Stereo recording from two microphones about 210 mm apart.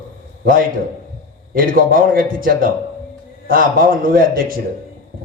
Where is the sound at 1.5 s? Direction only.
45° right (ahead or behind).